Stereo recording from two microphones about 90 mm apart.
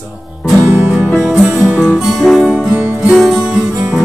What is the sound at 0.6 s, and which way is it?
Music, 25° right (ahead or behind).